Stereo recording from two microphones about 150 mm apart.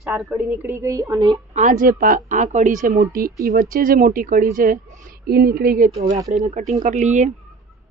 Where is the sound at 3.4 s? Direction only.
80° right.